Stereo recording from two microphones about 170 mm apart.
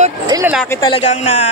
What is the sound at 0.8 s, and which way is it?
Speech, 30° left (ahead or behind).